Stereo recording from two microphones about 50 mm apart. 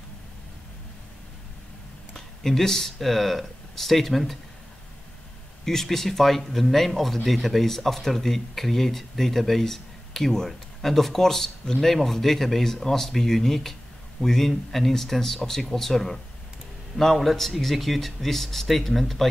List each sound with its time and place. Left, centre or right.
2.1 s speech: centre
5.7 s speech: centre